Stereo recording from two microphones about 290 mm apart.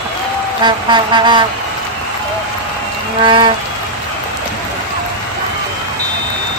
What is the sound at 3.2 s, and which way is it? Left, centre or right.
Speech, centre.